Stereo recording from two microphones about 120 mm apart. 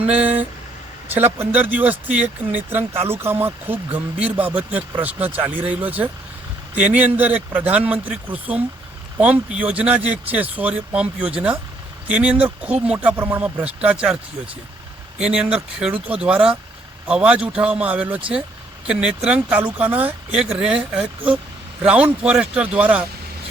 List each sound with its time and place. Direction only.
0.0 s speech: 15° right (ahead or behind)